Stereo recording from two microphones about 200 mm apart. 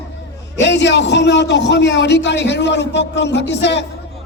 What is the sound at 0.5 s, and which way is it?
A man's voice, 60° left (ahead or behind).